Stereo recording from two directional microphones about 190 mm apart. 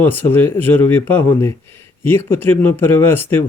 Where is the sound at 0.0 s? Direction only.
10° left (ahead or behind).